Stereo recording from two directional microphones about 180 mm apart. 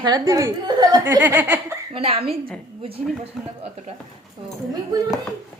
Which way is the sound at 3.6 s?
35° right (ahead or behind).